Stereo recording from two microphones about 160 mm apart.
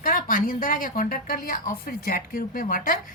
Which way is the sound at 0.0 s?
60° left (ahead or behind).